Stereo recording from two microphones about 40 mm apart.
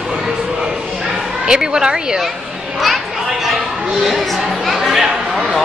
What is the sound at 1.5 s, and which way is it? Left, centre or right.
Speech, centre.